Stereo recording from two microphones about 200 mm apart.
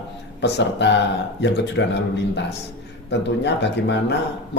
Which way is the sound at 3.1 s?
60° left (ahead or behind).